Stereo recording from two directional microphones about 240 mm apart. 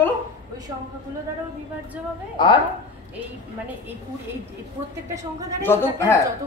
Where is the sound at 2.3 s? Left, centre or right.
Centre.